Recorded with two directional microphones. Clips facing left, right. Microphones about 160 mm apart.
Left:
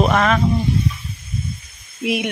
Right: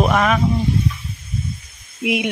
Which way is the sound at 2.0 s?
20° right (ahead or behind).